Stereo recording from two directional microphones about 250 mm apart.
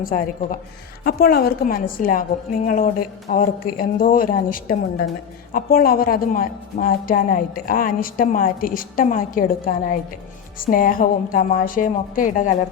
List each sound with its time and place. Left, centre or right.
0.0 s a woman's voice: left